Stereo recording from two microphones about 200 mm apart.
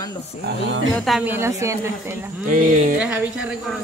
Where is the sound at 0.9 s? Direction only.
Centre (ahead or behind).